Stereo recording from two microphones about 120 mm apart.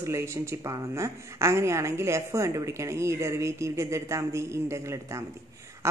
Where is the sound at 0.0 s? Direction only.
25° right (ahead or behind).